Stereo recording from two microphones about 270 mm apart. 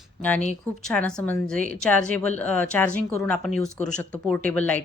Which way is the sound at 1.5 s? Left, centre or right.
Right.